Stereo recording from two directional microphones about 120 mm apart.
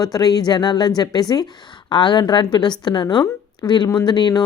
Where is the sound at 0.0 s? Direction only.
35° left (ahead or behind).